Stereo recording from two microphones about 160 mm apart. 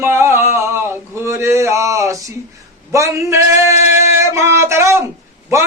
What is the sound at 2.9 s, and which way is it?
Speech, 20° right (ahead or behind).